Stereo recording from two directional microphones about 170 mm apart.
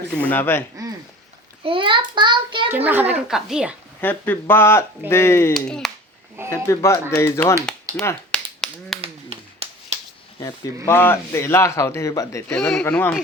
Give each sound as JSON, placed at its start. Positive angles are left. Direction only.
{"t": 0.1, "sound": "a man's voice", "side_deg": 10}
{"t": 1.6, "sound": "a child's voice", "side_deg": -30}
{"t": 2.6, "sound": "a child's voice", "side_deg": -10}
{"t": 4.0, "sound": "a man's voice", "side_deg": 10}
{"t": 5.5, "sound": "speech", "side_deg": 5}
{"t": 6.7, "sound": "a man's voice", "side_deg": 15}
{"t": 8.0, "sound": "finger snapping", "side_deg": 5}
{"t": 9.0, "sound": "tap", "side_deg": -35}
{"t": 10.8, "sound": "a man's voice", "side_deg": 15}
{"t": 12.5, "sound": "a man's voice", "side_deg": 5}